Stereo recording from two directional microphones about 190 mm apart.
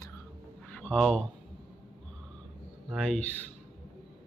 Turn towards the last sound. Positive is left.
turn(degrees=0)  # may be behind; listen again after turning